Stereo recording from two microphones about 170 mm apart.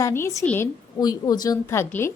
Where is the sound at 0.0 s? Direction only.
15° left (ahead or behind).